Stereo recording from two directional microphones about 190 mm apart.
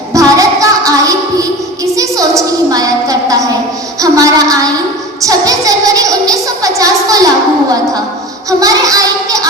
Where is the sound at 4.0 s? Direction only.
20° right (ahead or behind).